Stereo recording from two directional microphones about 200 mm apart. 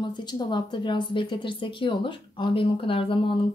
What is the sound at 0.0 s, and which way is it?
Speech, 20° left (ahead or behind).